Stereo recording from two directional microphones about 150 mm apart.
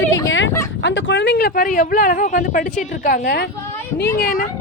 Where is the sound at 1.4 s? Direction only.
80° left.